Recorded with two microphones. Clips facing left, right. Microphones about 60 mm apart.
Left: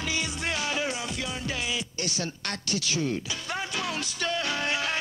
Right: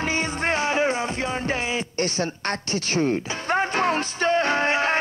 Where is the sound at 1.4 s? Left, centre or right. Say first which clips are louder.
Right 6 dB; right.